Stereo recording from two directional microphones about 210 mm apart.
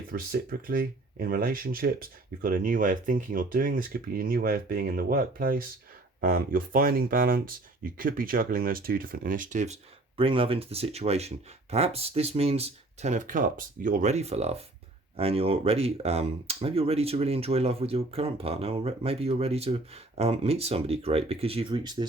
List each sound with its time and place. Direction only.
0.1 s speech: 45° right (ahead or behind)
10.2 s speech: 25° right (ahead or behind)